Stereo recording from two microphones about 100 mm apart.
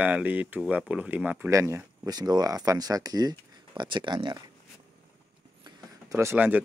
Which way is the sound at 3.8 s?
50° right (ahead or behind).